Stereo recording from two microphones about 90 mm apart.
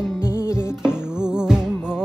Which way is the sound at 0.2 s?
30° left (ahead or behind).